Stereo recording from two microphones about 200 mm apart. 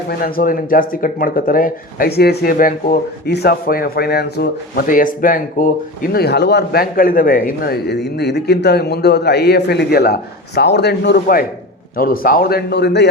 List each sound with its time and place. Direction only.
0.1 s speech: 45° left (ahead or behind)
3.2 s speech: 55° left (ahead or behind)